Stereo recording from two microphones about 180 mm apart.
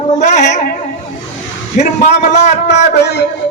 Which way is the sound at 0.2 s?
40° left (ahead or behind).